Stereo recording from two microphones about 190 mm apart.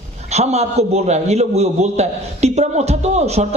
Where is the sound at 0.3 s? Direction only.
35° right (ahead or behind).